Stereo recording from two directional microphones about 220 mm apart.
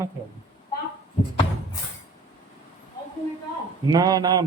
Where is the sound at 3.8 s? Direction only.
15° right (ahead or behind).